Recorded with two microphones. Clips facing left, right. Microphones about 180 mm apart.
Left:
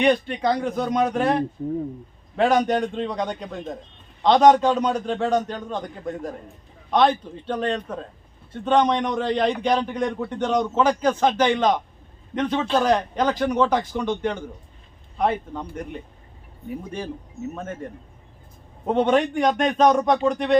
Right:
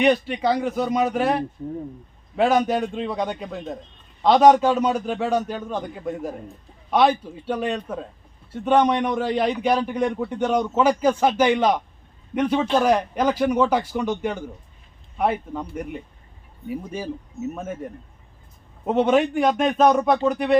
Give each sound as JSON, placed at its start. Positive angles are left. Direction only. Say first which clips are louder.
{"t": 0.0, "sound": "a man's voice", "louder": "right 1 dB", "side_deg": -5}